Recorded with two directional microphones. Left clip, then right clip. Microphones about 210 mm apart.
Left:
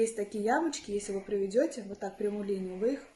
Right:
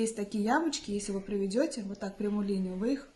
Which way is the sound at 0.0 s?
50° right (ahead or behind).